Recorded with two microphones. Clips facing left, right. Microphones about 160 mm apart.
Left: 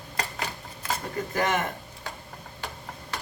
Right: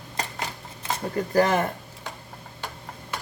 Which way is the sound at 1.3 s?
35° right (ahead or behind).